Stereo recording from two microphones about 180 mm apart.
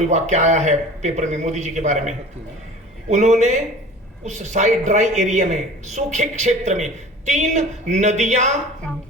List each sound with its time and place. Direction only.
0.0 s a man's voice: 40° right (ahead or behind)